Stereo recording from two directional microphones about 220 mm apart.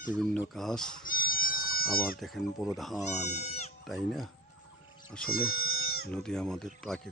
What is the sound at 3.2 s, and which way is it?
Speech, 30° left (ahead or behind).